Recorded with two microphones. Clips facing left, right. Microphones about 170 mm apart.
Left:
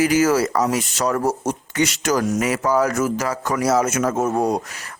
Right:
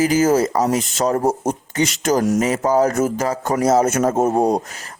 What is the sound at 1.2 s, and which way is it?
Speech, 55° right (ahead or behind).